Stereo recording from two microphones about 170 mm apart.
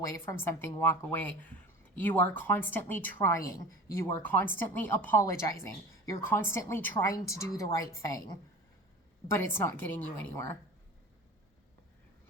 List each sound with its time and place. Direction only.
0.1 s a woman's voice: 15° left (ahead or behind)
9.3 s a woman's voice: 15° left (ahead or behind)